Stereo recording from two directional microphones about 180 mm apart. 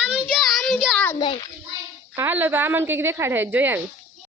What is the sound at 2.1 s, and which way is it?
A woman's voice, 10° right (ahead or behind).